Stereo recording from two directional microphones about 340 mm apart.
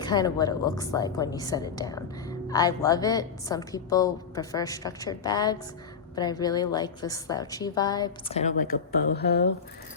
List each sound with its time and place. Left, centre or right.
0.0 s a woman's voice: centre; by 9.5 s left